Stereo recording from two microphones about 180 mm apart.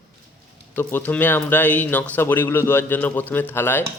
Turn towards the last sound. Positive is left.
turn(degrees=10)  # may be behind; listen again after turning